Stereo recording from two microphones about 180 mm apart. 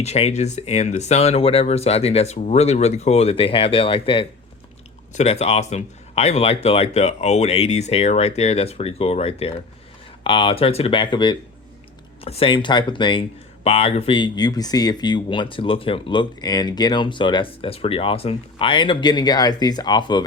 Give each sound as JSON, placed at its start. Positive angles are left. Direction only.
{"t": 0.0, "sound": "speech", "side_deg": 35}